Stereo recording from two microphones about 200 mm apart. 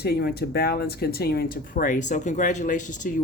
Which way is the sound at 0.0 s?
55° left (ahead or behind).